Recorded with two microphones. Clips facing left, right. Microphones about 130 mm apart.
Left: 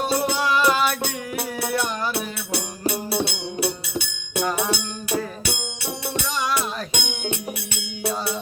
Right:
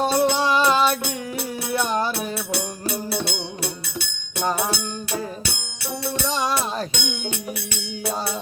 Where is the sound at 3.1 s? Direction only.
15° left (ahead or behind).